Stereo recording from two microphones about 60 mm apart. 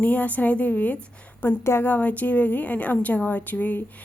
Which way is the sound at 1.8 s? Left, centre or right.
Left.